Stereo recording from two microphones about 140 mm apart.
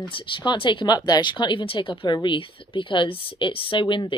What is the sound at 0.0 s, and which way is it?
Speech, 35° left (ahead or behind).